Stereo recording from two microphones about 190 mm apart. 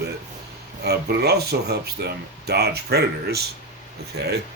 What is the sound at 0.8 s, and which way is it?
Speech, 60° right (ahead or behind).